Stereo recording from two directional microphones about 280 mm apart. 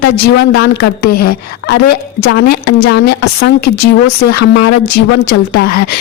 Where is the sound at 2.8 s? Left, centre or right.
Left.